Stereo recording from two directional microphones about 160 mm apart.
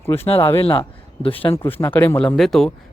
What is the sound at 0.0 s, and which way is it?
Speech, 15° left (ahead or behind).